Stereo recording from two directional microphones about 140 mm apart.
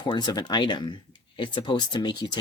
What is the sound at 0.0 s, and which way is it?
Speech, 30° left (ahead or behind).